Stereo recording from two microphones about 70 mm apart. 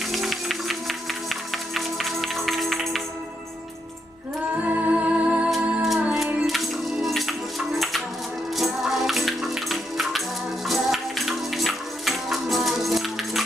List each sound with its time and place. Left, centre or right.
0.1 s music: centre
4.6 s music: right
5.5 s music: centre